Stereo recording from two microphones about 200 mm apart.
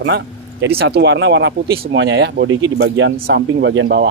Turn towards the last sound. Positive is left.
turn(degrees=-70)  # may be behind; listen again after turning